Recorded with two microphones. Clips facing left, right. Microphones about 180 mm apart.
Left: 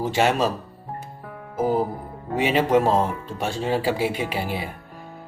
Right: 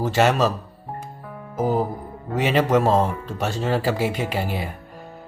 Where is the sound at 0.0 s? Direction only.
10° left (ahead or behind).